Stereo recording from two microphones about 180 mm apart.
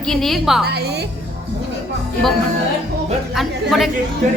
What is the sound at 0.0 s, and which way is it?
Speech, centre (ahead or behind).